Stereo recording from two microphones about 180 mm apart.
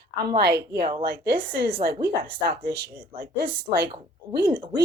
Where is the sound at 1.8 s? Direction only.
65° right (ahead or behind).